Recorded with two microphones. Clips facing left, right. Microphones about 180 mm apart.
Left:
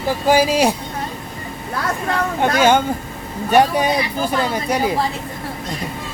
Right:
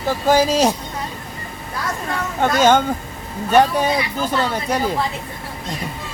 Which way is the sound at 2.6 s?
10° left (ahead or behind).